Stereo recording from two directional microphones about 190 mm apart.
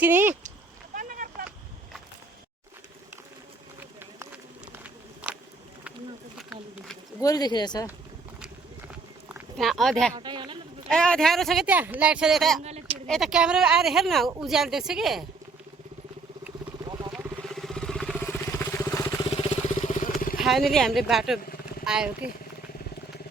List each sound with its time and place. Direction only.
0.0 s speech: 10° right (ahead or behind)
0.9 s a sound: 45° right (ahead or behind)
4.7 s a sound: 5° right (ahead or behind)
7.2 s speech: 20° left (ahead or behind)
9.3 s a sound: centre (ahead or behind)
10.2 s speech: 25° right (ahead or behind)
10.8 s speech: 5° left (ahead or behind)
12.6 s a sound: 35° right (ahead or behind)
13.1 s speech: centre (ahead or behind)
16.8 s vehicle: 20° right (ahead or behind)
17.4 s vehicle: centre (ahead or behind); by 19.5 s 20° left (ahead or behind)
19.8 s vehicle: 40° left (ahead or behind)
20.4 s speech: centre (ahead or behind)